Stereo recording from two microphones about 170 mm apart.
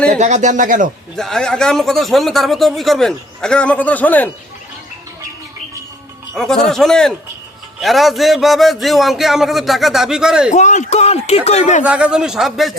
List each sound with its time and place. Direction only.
0.1 s speech: 45° right (ahead or behind)
1.1 s speech: 5° left (ahead or behind)
6.3 s speech: centre (ahead or behind)
10.5 s speech: 45° left (ahead or behind)
11.8 s speech: 5° right (ahead or behind)